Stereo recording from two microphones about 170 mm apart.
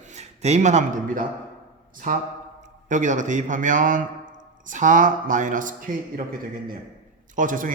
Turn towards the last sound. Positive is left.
turn(degrees=-50)  # may be behind; listen again after turning